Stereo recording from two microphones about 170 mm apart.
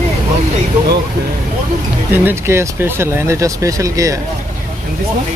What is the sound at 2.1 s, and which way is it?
Speech, 15° right (ahead or behind).